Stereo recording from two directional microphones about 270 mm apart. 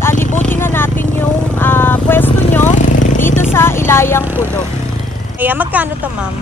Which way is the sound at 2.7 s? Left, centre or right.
Left.